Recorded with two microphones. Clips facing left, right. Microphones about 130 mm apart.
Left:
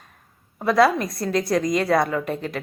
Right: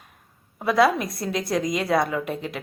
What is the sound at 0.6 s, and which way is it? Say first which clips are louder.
A woman's voice: left 2 dB; centre (ahead or behind).